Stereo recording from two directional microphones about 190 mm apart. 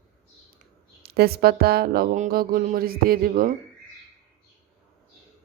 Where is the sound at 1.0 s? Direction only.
55° right (ahead or behind).